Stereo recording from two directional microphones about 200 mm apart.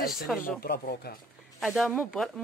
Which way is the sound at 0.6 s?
50° left (ahead or behind).